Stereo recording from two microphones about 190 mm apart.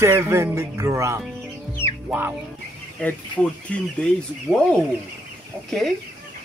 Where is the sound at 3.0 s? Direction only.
5° left (ahead or behind).